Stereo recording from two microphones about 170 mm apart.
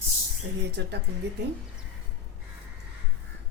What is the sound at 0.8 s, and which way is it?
Speech, 90° right.